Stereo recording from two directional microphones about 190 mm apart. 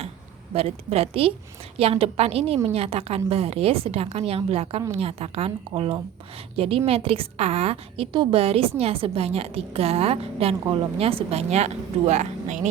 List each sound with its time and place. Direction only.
0.5 s a woman's voice: 30° right (ahead or behind)